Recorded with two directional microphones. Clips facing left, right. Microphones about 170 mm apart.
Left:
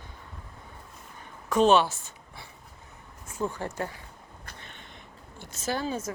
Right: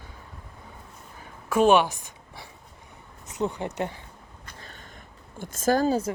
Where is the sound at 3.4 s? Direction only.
25° right (ahead or behind).